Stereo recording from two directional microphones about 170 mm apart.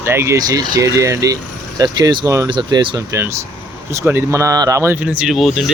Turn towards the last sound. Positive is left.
turn(degrees=0)  # may be behind; listen again after turning